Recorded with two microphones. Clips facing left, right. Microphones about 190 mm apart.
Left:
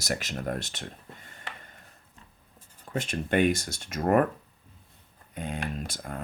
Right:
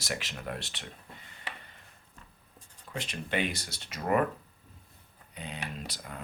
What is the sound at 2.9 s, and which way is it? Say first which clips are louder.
Speech: left 7 dB; 45° left (ahead or behind).